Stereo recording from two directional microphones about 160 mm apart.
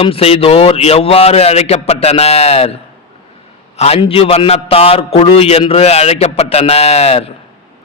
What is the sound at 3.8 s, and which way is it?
Speech, 35° left (ahead or behind).